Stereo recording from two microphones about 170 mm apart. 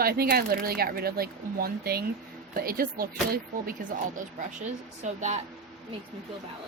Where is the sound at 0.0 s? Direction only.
65° right (ahead or behind).